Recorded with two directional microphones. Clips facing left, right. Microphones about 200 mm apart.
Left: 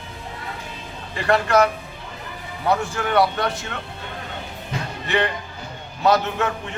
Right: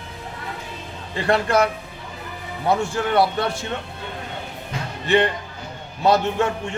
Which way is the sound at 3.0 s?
30° right (ahead or behind).